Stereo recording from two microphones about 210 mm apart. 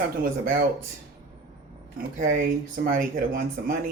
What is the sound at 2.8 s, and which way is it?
Speech, 45° right (ahead or behind).